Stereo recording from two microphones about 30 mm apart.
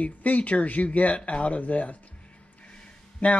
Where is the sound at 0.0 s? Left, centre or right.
Left.